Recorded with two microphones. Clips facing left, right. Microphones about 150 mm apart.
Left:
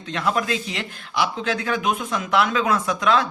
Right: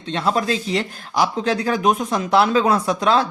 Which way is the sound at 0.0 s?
30° right (ahead or behind).